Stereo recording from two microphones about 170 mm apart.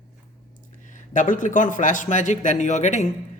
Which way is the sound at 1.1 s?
50° left (ahead or behind).